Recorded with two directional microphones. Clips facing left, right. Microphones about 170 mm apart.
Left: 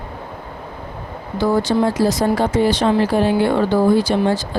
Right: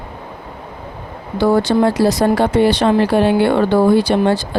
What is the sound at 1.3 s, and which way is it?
Speech, 65° right (ahead or behind).